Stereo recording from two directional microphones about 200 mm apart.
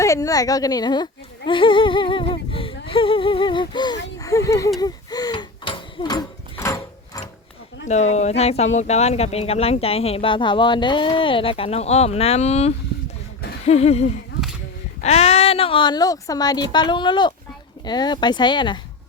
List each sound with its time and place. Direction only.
0.0 s a woman's voice: 15° left (ahead or behind)
1.5 s humming: 25° left (ahead or behind)
4.2 s speech: 15° left (ahead or behind)
4.8 s a sound: 20° left (ahead or behind)
7.9 s a woman's voice: 35° left (ahead or behind)